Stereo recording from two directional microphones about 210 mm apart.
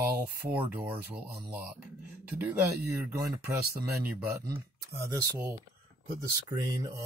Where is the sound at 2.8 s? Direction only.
15° right (ahead or behind).